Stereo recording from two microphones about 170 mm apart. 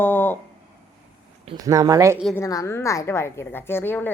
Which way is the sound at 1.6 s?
20° right (ahead or behind).